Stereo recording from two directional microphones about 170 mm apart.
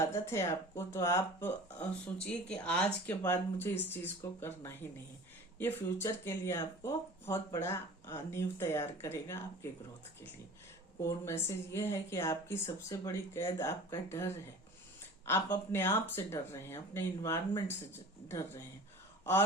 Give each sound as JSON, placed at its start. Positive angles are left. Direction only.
{"t": 0.0, "sound": "speech", "side_deg": 15}
{"t": 11.0, "sound": "speech", "side_deg": 15}